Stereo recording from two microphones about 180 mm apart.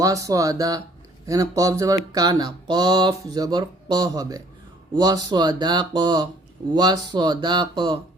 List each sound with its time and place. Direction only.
0.0 s speech: 20° right (ahead or behind)